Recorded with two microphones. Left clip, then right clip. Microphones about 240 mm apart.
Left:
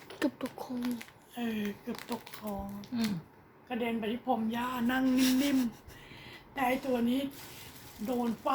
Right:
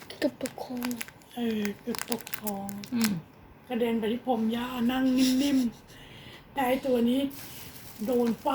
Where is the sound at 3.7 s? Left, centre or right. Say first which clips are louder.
Right 6 dB; centre.